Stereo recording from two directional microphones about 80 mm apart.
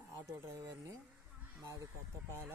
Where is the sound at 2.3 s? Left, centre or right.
Right.